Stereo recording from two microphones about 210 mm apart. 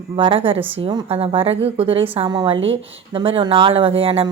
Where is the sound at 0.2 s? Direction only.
25° right (ahead or behind).